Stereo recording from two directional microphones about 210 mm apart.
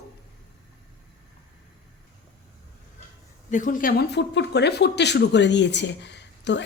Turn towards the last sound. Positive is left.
turn(degrees=55)  # may be behind; listen again after turning